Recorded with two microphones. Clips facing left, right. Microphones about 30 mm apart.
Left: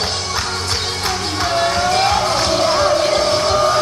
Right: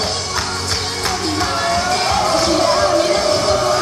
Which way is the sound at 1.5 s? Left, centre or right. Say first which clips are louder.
Left 4 dB; centre.